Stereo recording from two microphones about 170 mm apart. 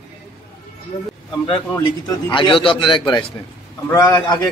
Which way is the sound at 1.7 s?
20° left (ahead or behind).